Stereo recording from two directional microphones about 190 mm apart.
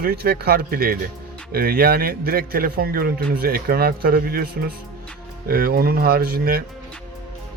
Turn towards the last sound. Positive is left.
turn(degrees=-50)  # may be behind; listen again after turning